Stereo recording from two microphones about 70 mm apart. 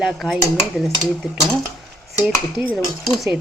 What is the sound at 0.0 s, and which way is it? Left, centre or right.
Dishes, centre.